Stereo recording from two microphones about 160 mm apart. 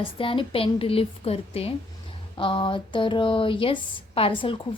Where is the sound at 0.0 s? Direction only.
35° left (ahead or behind).